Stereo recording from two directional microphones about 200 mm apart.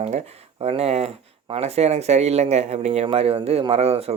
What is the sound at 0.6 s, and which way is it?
Speech, 30° right (ahead or behind).